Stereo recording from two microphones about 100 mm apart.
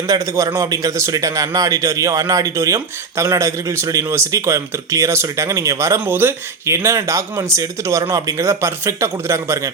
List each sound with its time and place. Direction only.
0.1 s a man's voice: 35° right (ahead or behind)